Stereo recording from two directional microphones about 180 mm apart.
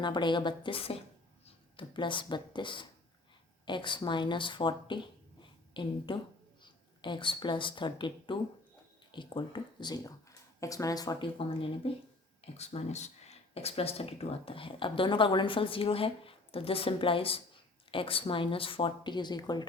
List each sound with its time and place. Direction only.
0.0 s speech: 25° left (ahead or behind)